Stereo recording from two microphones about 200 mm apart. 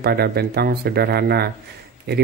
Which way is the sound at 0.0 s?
50° right (ahead or behind).